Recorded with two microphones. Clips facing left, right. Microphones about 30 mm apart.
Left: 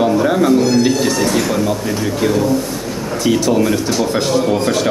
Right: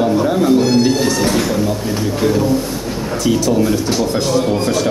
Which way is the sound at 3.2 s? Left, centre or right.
Centre.